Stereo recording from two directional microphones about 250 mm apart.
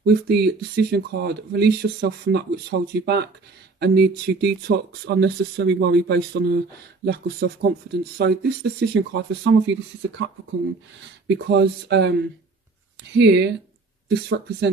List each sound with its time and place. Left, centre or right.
0.0 s speech: right
11.3 s speech: right
13.1 s speech: right